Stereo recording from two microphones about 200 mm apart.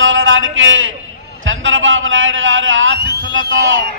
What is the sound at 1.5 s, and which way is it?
Speech, 75° right (ahead or behind).